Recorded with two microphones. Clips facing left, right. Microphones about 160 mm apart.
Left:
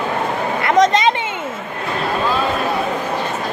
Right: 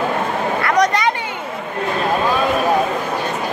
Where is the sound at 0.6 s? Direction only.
20° left (ahead or behind).